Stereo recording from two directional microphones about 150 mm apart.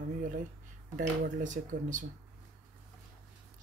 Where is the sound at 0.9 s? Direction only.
60° right (ahead or behind).